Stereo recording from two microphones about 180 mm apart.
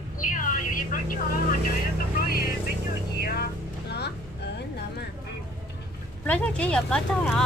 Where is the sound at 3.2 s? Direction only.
60° left (ahead or behind).